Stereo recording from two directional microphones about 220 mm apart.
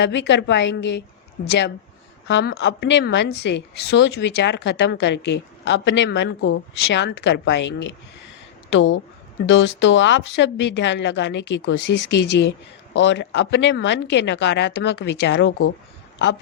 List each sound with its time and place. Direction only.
0.0 s a woman's voice: 55° left (ahead or behind)